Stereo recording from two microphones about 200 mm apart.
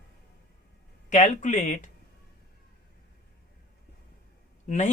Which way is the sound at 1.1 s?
40° left (ahead or behind).